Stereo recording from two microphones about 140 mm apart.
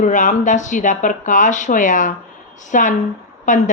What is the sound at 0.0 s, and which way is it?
A woman's voice, 60° left (ahead or behind).